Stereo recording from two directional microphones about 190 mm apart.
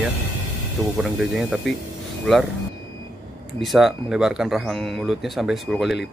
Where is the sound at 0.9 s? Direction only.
5° right (ahead or behind).